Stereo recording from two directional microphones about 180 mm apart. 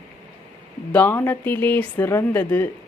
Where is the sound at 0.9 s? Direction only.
10° left (ahead or behind).